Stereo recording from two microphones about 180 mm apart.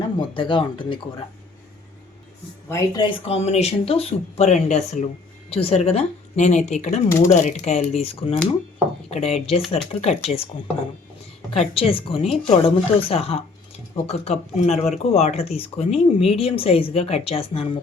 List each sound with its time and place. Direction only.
0.2 s speech: 25° left (ahead or behind)
2.6 s speech: 20° left (ahead or behind)
3.2 s speech: 35° left (ahead or behind)
11.7 s speech: 30° left (ahead or behind)